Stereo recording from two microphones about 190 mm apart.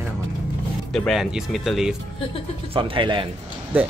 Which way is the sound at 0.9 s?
Centre (ahead or behind).